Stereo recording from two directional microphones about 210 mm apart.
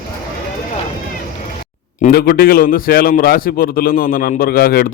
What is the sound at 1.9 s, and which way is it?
A man's voice, 45° left (ahead or behind).